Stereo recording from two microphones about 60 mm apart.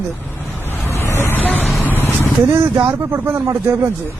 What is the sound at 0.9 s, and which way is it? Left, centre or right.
Vehicle, left.